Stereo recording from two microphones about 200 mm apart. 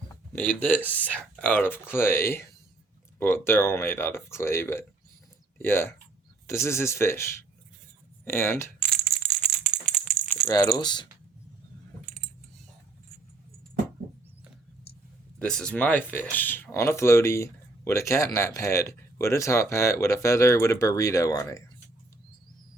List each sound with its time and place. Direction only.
0.3 s speech: 10° left (ahead or behind)
9.0 s rattle: centre (ahead or behind)
10.5 s speech: 20° left (ahead or behind)
15.4 s speech: 5° left (ahead or behind)